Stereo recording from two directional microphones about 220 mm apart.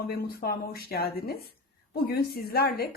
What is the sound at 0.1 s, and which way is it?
Speech, 45° left (ahead or behind).